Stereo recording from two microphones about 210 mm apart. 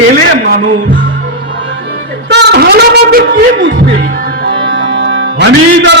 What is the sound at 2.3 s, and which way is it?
Speech, 50° right (ahead or behind).